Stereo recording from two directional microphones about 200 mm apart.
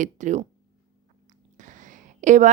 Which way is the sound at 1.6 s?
40° right (ahead or behind).